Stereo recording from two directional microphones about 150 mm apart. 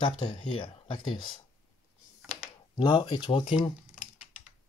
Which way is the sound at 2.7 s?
30° left (ahead or behind).